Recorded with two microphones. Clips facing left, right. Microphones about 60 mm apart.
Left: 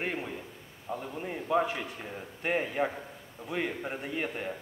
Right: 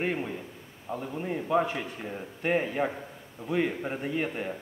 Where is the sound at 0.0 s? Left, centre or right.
Centre.